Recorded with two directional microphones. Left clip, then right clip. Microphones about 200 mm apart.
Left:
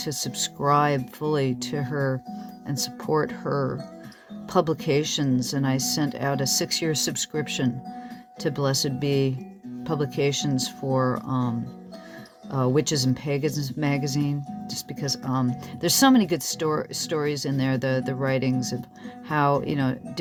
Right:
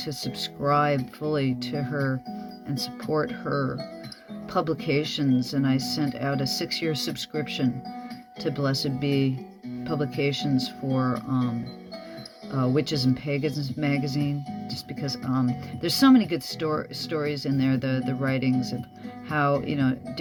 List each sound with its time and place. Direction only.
0.0 s speech: 55° left (ahead or behind)
12.5 s speech: 55° left (ahead or behind)